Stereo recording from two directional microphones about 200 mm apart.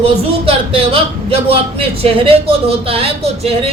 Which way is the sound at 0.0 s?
30° right (ahead or behind).